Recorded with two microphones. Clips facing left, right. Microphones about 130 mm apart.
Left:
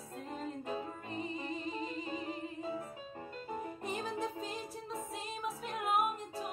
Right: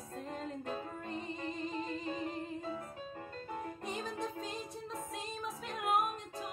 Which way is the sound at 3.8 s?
5° left (ahead or behind).